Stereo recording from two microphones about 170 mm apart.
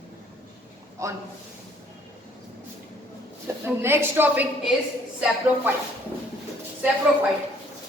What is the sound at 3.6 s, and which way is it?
Speech, 15° right (ahead or behind).